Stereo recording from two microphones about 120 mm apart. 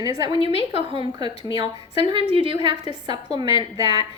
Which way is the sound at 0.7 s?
45° right (ahead or behind).